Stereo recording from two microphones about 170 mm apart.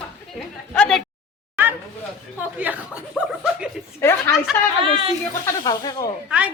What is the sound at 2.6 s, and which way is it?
Chuckle, 10° right (ahead or behind).